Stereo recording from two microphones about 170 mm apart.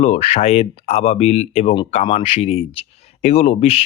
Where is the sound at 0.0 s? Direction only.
40° left (ahead or behind).